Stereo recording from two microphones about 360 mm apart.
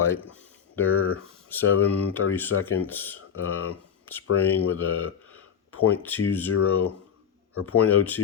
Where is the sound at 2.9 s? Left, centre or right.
Centre.